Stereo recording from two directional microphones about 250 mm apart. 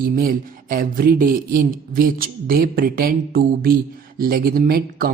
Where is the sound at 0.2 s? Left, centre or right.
Right.